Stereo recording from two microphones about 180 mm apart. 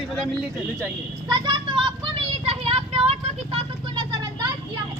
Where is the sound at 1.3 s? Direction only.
25° right (ahead or behind).